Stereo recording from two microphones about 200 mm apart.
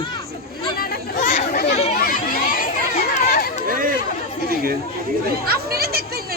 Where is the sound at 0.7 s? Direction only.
45° left (ahead or behind).